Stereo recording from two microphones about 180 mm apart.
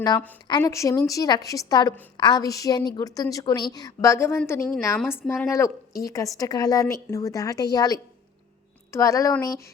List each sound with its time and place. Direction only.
0.4 s a woman's voice: 20° left (ahead or behind)